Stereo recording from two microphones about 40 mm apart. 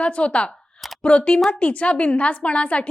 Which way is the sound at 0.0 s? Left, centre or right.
Left.